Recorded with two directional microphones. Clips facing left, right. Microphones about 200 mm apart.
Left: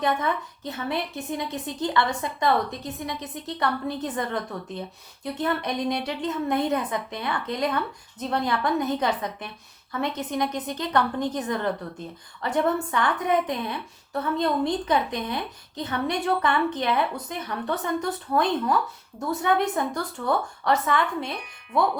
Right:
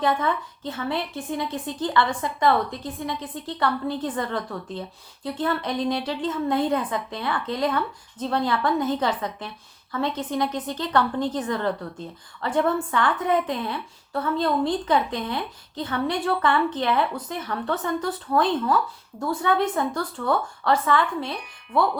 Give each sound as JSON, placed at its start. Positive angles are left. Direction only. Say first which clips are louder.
{"t": 0.0, "sound": "a woman's voice", "louder": "right 2 dB", "side_deg": 20}